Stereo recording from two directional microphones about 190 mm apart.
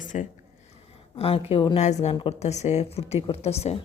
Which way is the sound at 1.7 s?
35° left (ahead or behind).